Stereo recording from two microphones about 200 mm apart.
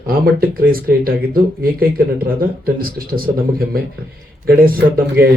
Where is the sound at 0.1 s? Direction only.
50° right (ahead or behind).